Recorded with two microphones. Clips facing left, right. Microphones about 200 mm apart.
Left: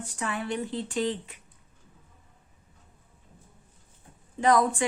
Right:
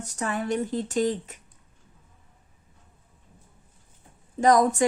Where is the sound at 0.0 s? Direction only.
40° right (ahead or behind).